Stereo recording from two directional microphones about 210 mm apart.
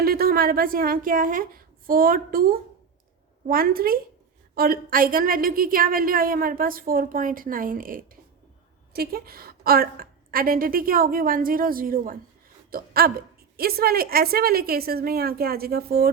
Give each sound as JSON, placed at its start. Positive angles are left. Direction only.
{"t": 0.0, "sound": "a woman's voice", "side_deg": -45}